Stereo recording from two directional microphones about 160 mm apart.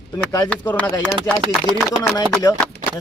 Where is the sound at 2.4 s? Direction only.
25° left (ahead or behind).